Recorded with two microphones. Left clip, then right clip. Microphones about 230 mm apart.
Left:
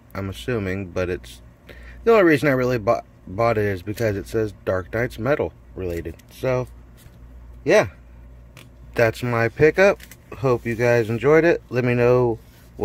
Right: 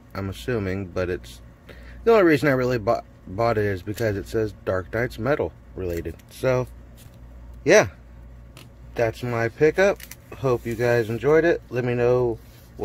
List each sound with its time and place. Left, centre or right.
0.1 s speech: centre
8.9 s speech: left